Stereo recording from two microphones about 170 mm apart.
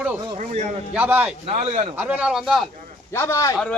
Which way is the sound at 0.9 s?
10° right (ahead or behind).